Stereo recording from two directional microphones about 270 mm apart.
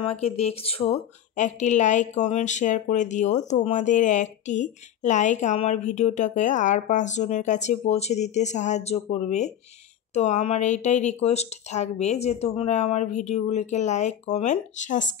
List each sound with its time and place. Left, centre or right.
0.1 s speech: left